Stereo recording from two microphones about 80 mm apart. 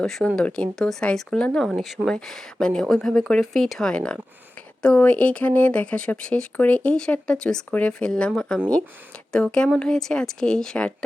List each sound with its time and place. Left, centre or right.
0.0 s speech: centre